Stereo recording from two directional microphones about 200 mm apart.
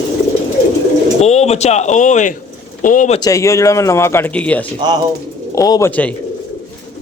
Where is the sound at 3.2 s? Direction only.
15° left (ahead or behind).